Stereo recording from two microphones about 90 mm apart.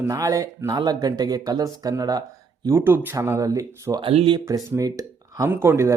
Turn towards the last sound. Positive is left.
turn(degrees=-30)  # may be behind; listen again after turning